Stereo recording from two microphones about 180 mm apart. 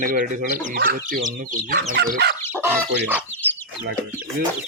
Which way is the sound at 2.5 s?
15° right (ahead or behind).